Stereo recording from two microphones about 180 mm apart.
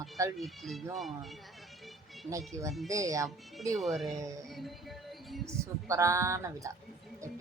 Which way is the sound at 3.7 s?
Centre (ahead or behind).